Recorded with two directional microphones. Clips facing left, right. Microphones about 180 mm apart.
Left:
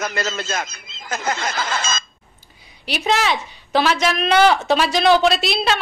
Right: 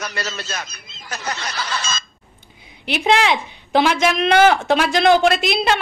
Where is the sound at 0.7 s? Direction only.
90° left.